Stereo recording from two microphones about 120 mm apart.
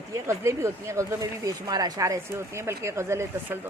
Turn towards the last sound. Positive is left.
turn(degrees=-25)  # may be behind; listen again after turning